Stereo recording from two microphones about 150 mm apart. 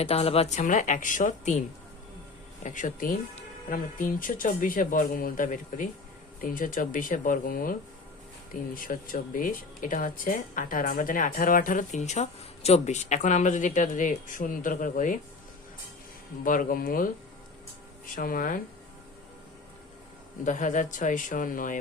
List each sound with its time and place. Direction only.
0.0 s a woman's voice: 40° left (ahead or behind)
0.6 s speech: 60° left (ahead or behind)
2.6 s speech: 60° left (ahead or behind)
16.4 s speech: 65° left (ahead or behind)
20.4 s speech: 60° left (ahead or behind)